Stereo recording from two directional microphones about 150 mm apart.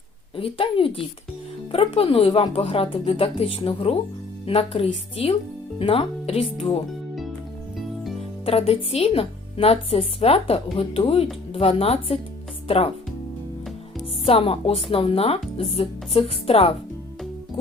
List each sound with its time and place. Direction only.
0.3 s a woman's voice: 35° left (ahead or behind)
8.4 s a woman's voice: 40° left (ahead or behind)
14.3 s a woman's voice: 40° left (ahead or behind)